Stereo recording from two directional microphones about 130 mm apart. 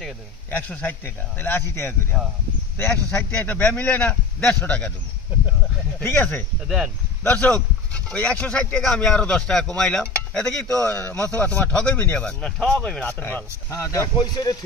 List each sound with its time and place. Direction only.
0.5 s speech: 10° left (ahead or behind)
5.9 s speech: 15° left (ahead or behind)
13.2 s speech: 20° left (ahead or behind)